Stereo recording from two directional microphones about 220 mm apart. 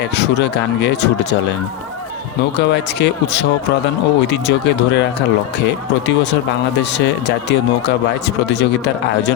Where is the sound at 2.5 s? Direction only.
50° left (ahead or behind).